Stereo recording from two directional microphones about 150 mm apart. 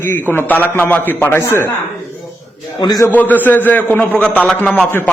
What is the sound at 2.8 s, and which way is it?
Speech, 25° left (ahead or behind).